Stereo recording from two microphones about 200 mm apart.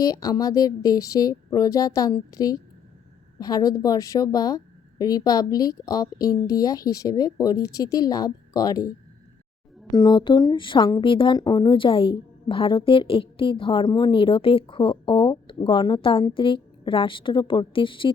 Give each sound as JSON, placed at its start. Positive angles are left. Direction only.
{"t": 0.0, "sound": "speech", "side_deg": 20}
{"t": 9.9, "sound": "speech", "side_deg": 20}